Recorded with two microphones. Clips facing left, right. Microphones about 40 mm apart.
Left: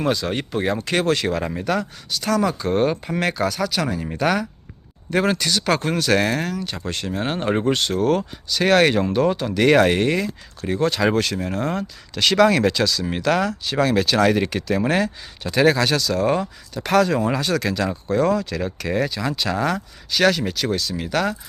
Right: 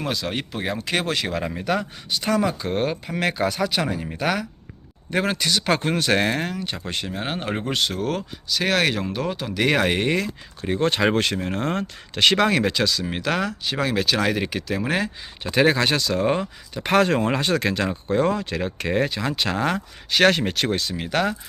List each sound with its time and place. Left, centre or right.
0.0 s speech: centre
2.0 s speech: right; by 3.3 s centre
3.5 s speech: right
4.0 s speech: centre
10.8 s speech: right
12.1 s speech: right; by 15.1 s centre
15.4 s speech: right
17.0 s speech: right
21.0 s speech: right